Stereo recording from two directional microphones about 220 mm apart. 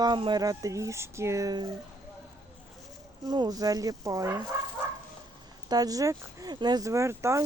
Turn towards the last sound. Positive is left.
turn(degrees=-15)  # may be behind; listen again after turning